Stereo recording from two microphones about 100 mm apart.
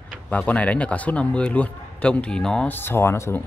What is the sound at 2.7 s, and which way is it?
Speech, 25° left (ahead or behind).